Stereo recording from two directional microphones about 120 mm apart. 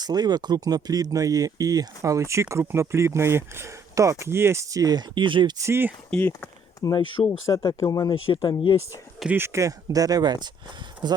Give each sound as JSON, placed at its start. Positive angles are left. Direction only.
{"t": 0.0, "sound": "speech", "side_deg": -35}
{"t": 5.5, "sound": "speech", "side_deg": -20}
{"t": 6.1, "sound": "speech", "side_deg": 10}
{"t": 6.8, "sound": "speech", "side_deg": 30}
{"t": 9.3, "sound": "speech", "side_deg": -20}